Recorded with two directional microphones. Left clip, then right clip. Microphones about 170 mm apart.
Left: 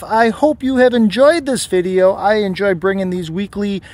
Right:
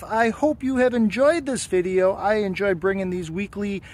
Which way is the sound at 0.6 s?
40° left (ahead or behind).